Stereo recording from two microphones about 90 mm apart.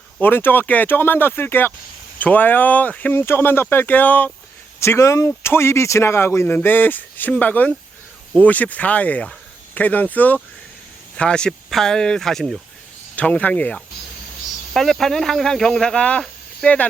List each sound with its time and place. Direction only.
0.2 s speech: 25° left (ahead or behind)
4.8 s speech: 30° left (ahead or behind); by 12.6 s 5° left (ahead or behind)
13.1 s speech: 15° left (ahead or behind)